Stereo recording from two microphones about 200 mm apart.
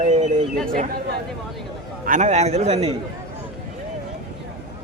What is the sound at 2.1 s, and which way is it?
Speech, 35° right (ahead or behind).